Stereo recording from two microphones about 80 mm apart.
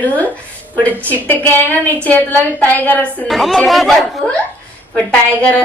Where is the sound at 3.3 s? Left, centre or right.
Centre.